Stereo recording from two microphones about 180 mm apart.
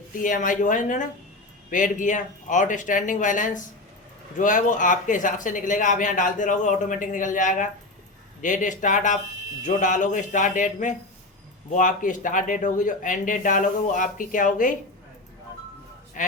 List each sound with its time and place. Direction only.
0.2 s speech: 45° left (ahead or behind)
16.2 s speech: 45° left (ahead or behind)